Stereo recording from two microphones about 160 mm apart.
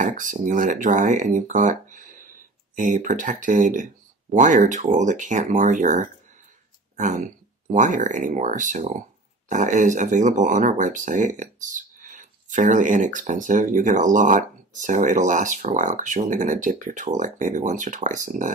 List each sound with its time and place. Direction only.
0.0 s speech: 55° right (ahead or behind)